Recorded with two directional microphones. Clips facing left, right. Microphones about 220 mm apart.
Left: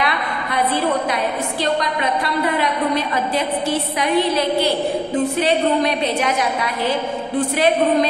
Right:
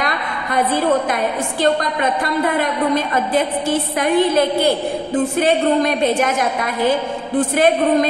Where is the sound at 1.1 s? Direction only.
50° right (ahead or behind).